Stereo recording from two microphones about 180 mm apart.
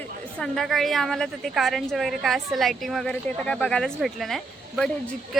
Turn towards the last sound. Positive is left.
turn(degrees=0)  # may be behind; listen again after turning